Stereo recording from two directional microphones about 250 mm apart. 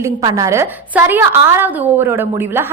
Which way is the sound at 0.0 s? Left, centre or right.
Centre.